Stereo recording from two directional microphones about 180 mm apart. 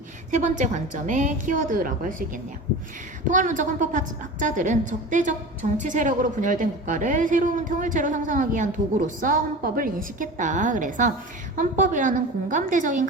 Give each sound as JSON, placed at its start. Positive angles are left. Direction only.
{"t": 0.3, "sound": "speech", "side_deg": -40}
{"t": 3.2, "sound": "speech", "side_deg": -45}